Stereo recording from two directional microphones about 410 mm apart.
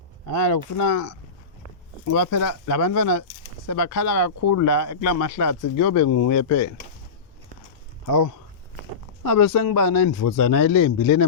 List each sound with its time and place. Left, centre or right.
0.3 s speech: left
2.1 s speech: left
8.0 s speech: left